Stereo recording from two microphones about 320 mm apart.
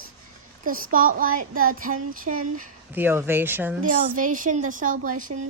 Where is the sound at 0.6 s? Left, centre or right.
Right.